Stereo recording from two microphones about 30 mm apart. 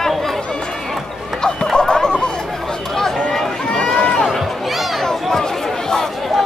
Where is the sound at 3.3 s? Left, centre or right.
Centre.